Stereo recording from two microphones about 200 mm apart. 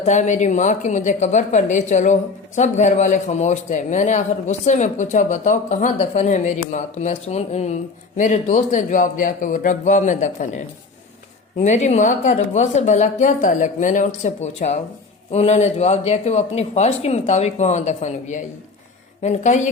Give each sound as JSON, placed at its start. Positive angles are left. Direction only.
{"t": 0.0, "sound": "a man's voice", "side_deg": 35}
{"t": 11.6, "sound": "a man's voice", "side_deg": 35}